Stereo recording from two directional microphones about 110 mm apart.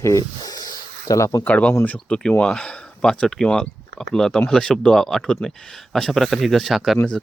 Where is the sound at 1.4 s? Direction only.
10° left (ahead or behind).